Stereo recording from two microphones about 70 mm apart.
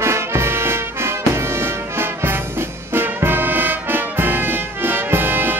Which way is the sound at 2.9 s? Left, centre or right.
Right.